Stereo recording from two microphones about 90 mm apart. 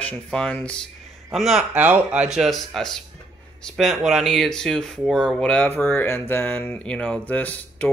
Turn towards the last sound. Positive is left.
turn(degrees=15)  # may be behind; listen again after turning